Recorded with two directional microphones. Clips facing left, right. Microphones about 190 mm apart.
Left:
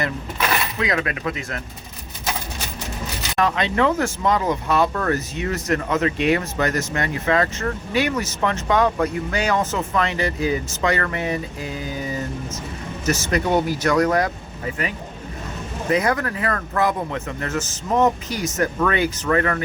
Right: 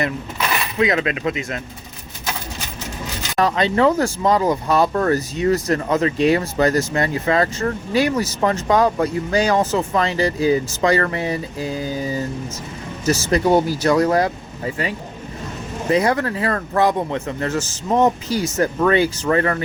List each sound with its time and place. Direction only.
0.8 s speech: 20° right (ahead or behind)
3.3 s speech: 35° right (ahead or behind)
15.9 s speech: 30° right (ahead or behind)